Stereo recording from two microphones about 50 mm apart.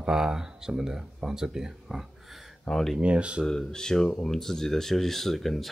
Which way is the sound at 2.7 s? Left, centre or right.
Centre.